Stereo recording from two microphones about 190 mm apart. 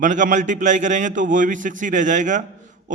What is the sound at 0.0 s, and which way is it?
A man's voice, 40° right (ahead or behind).